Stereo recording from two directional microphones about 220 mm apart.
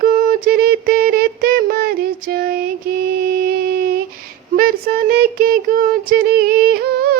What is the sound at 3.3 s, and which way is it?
Music, 40° right (ahead or behind).